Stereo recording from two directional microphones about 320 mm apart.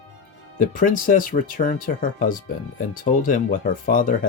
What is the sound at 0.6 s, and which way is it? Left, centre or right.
Speech, left.